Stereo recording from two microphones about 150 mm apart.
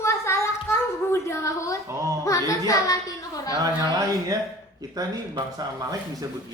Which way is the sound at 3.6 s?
25° right (ahead or behind).